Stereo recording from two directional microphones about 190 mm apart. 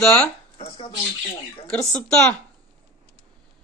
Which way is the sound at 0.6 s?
30° left (ahead or behind).